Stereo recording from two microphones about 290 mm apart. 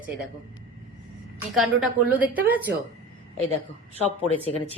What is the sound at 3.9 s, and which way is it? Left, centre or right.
Speech, centre.